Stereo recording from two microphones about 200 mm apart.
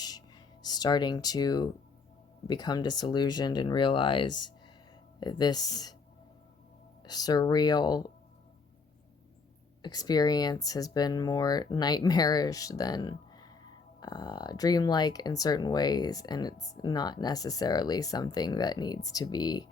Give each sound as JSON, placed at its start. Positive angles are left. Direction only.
{"t": 0.6, "sound": "speech", "side_deg": 20}
{"t": 7.0, "sound": "speech", "side_deg": 20}
{"t": 9.8, "sound": "speech", "side_deg": 20}